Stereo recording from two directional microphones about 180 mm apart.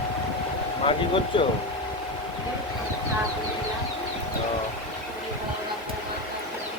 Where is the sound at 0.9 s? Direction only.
30° left (ahead or behind).